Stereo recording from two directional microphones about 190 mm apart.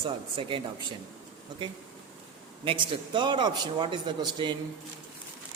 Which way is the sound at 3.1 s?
25° right (ahead or behind).